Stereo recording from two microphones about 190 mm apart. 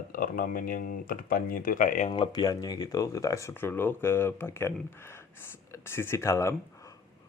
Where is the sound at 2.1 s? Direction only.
25° left (ahead or behind).